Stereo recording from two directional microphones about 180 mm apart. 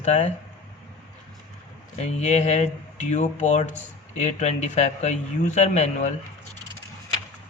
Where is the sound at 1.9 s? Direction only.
40° left (ahead or behind).